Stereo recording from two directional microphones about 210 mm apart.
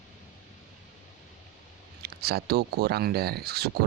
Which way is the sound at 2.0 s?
50° right (ahead or behind).